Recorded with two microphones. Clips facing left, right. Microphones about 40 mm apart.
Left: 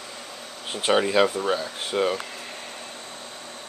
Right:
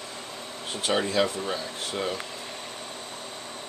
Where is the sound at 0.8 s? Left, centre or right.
Left.